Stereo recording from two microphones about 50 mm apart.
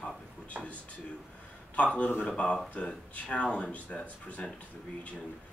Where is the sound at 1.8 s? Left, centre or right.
Left.